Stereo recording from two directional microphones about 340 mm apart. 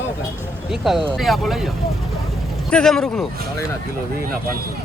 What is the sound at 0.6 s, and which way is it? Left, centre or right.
Speech, centre.